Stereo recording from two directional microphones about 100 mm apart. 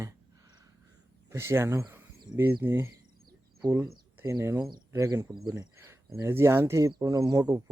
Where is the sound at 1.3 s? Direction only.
25° right (ahead or behind).